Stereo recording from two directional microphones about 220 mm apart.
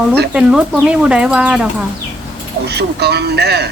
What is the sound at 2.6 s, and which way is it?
Speech, 50° right (ahead or behind).